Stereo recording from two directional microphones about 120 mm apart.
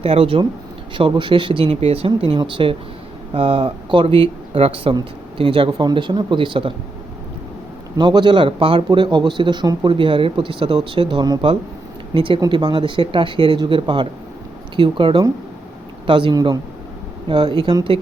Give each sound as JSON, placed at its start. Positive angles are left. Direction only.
{"t": 0.0, "sound": "a man's voice", "side_deg": -55}
{"t": 7.9, "sound": "a man's voice", "side_deg": -40}